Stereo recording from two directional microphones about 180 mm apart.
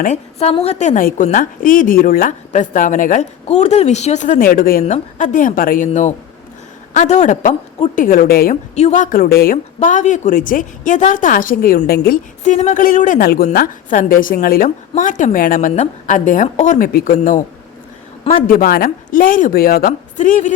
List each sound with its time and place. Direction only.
0.0 s a woman's voice: 40° left (ahead or behind); by 8.5 s 55° left (ahead or behind)
8.7 s a woman's voice: 40° left (ahead or behind)
18.4 s a woman's voice: 55° left (ahead or behind)